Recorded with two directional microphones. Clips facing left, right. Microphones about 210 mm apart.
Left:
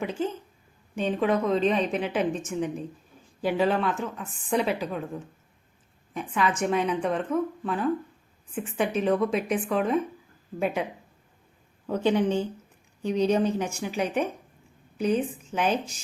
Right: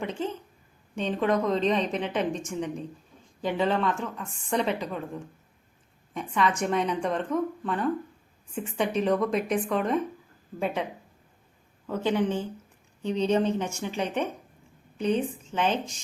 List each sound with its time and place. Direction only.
0.0 s a woman's voice: 5° left (ahead or behind)
11.9 s a woman's voice: 15° left (ahead or behind)